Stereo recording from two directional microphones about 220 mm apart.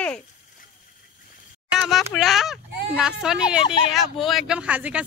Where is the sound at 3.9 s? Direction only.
Centre (ahead or behind).